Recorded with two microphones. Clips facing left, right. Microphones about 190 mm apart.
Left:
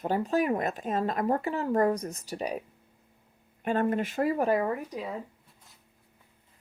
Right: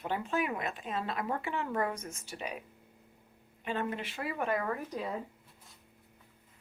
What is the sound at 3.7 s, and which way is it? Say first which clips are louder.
Speech: left 8 dB; 45° left (ahead or behind).